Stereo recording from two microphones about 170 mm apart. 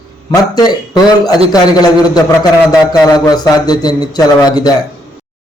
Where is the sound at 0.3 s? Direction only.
25° left (ahead or behind).